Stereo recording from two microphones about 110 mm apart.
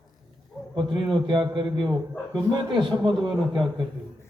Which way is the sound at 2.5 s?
45° right (ahead or behind).